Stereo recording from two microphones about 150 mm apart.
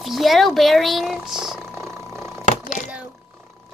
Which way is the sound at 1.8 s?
15° right (ahead or behind).